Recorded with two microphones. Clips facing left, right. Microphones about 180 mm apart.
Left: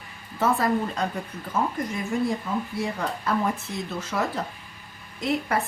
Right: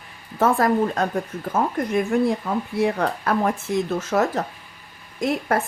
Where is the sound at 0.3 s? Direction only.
50° right (ahead or behind).